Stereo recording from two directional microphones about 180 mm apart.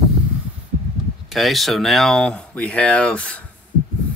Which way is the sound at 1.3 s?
Centre (ahead or behind).